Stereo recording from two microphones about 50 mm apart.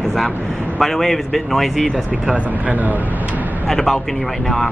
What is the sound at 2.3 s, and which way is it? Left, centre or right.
Speech, right.